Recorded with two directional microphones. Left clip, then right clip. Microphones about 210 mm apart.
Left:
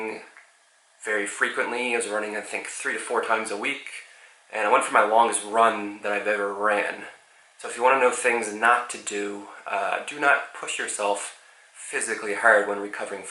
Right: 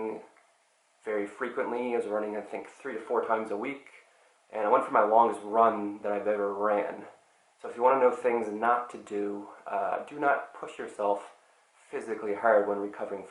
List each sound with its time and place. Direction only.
0.0 s a sound: 10° right (ahead or behind)
1.0 s speech: 10° right (ahead or behind)
9.3 s speech: 20° right (ahead or behind)
9.6 s speech: 10° right (ahead or behind)